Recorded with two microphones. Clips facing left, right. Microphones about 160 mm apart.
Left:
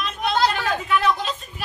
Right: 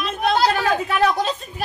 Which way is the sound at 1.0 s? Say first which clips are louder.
Right 2 dB; 40° right (ahead or behind).